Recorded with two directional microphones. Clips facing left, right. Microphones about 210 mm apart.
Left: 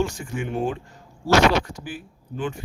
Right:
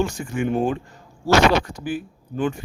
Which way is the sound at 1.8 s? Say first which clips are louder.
Right 8 dB; 50° right (ahead or behind).